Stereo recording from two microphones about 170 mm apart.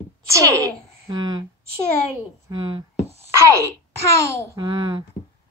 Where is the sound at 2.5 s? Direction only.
25° right (ahead or behind).